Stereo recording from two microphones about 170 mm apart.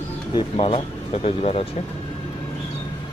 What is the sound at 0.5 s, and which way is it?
Speech, 40° left (ahead or behind).